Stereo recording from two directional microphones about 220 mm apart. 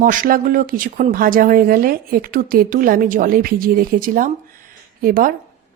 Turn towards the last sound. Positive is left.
turn(degrees=-40)  # may be behind; listen again after turning